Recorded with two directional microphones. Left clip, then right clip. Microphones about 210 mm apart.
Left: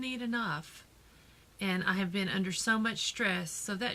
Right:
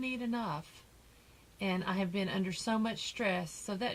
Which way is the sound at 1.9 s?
40° left (ahead or behind).